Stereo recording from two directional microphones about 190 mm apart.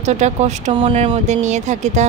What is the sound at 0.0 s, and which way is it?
Speech, 35° right (ahead or behind).